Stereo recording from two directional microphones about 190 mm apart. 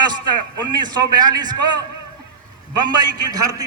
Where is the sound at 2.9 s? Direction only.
20° right (ahead or behind).